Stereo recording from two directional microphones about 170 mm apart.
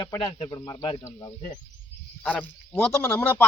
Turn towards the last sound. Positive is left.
turn(degrees=10)  # may be behind; listen again after turning